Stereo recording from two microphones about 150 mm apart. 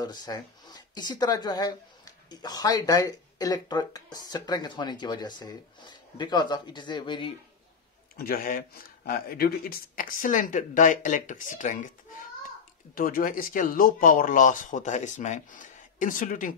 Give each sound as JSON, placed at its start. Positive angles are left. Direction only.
{"t": 0.0, "sound": "speech", "side_deg": 25}
{"t": 8.2, "sound": "speech", "side_deg": 80}
{"t": 12.4, "sound": "speech", "side_deg": 70}